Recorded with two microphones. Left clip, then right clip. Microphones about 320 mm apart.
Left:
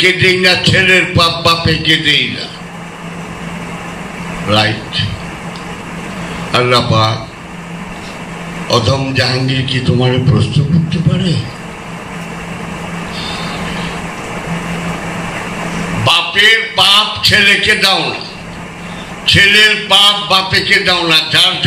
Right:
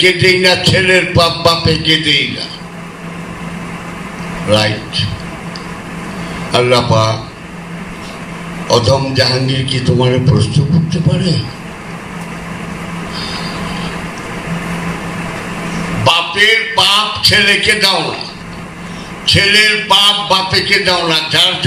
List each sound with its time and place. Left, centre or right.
0.0 s a man's voice: centre
4.5 s a man's voice: centre
6.5 s a man's voice: centre
8.6 s a man's voice: centre
16.0 s a man's voice: centre
19.2 s a man's voice: centre